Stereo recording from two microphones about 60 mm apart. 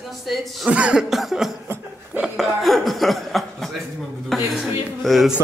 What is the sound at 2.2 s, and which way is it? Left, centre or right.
Chuckle, centre.